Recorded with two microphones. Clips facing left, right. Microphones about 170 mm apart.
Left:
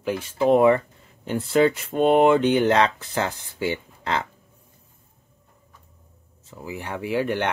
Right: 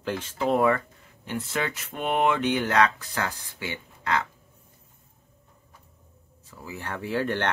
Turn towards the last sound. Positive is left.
turn(degrees=15)  # may be behind; listen again after turning